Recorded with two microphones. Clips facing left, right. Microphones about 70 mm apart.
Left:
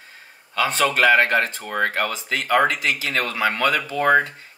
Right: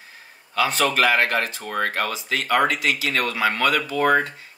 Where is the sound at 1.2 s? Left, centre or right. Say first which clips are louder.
Left 2 dB; left.